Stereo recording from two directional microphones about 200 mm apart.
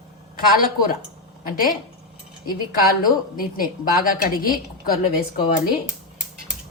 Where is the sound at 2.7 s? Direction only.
45° left (ahead or behind).